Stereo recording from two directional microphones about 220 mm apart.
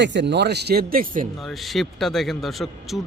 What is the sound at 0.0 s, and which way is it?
Speech, 55° right (ahead or behind).